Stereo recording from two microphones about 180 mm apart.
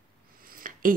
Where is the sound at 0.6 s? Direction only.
50° right (ahead or behind).